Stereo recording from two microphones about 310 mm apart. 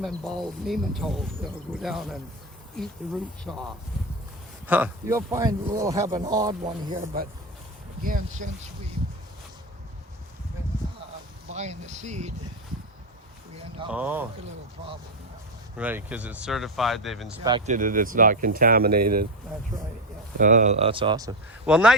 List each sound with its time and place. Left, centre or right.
0.0 s speech: centre
3.4 s speech: centre
6.6 s speech: right
11.5 s speech: right
13.9 s speech: centre
15.8 s speech: centre
17.4 s speech: centre
17.7 s speech: right
20.4 s speech: right; by 21.9 s centre